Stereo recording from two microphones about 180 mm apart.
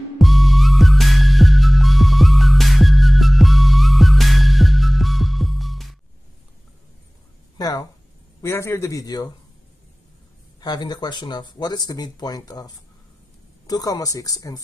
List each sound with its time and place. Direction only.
0.2 s music: centre (ahead or behind)
7.5 s a sound: 20° left (ahead or behind)
8.4 s a man's voice: 15° left (ahead or behind)
10.6 s speech: 20° left (ahead or behind)